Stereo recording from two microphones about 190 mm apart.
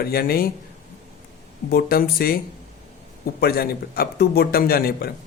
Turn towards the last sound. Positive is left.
turn(degrees=55)  # may be behind; listen again after turning